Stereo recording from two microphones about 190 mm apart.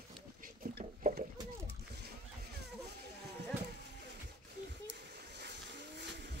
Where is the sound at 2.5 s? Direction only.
60° right (ahead or behind).